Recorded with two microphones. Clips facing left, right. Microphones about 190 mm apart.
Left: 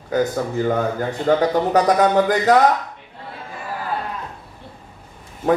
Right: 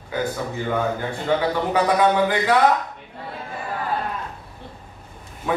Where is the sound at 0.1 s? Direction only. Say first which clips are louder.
Left 5 dB; 40° left (ahead or behind).